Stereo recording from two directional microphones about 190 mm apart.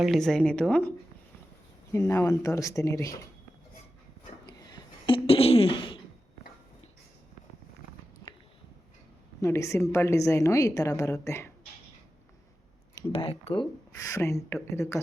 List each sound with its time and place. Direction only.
0.0 s a woman's voice: centre (ahead or behind)
4.4 s a sound: 25° left (ahead or behind)
9.4 s a woman's voice: 15° left (ahead or behind)
13.1 s speech: 30° left (ahead or behind)
13.9 s a woman's voice: 15° left (ahead or behind)